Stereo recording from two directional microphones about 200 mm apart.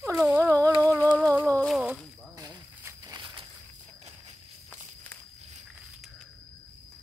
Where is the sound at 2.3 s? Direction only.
15° right (ahead or behind).